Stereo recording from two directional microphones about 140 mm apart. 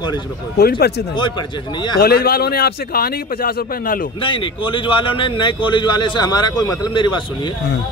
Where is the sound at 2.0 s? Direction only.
90° left.